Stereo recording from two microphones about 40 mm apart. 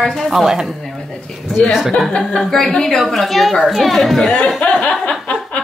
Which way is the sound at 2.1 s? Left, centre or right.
Centre.